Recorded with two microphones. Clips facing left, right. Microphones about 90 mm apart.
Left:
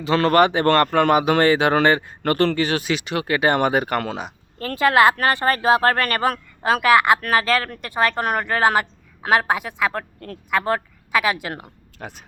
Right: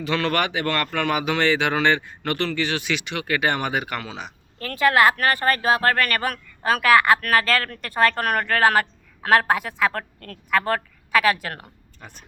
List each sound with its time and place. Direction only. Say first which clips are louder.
0.0 s a man's voice: left 7 dB; 35° left (ahead or behind)
3.5 s speech: left 6 dB; 40° left (ahead or behind)
4.6 s a woman's voice: left 2 dB; 30° left (ahead or behind); by 11.7 s 10° left (ahead or behind)
12.0 s speech: left 9 dB; 75° left (ahead or behind)